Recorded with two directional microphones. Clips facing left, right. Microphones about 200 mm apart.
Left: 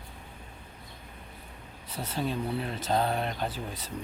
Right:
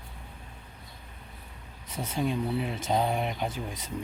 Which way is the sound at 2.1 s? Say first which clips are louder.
Right 2 dB; 10° right (ahead or behind).